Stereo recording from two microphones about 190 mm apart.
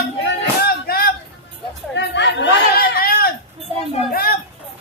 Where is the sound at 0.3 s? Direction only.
55° left (ahead or behind).